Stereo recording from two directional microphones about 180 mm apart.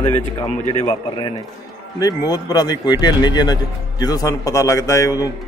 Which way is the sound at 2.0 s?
20° left (ahead or behind).